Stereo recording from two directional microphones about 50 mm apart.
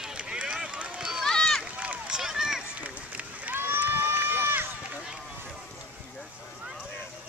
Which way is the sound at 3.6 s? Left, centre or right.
Right.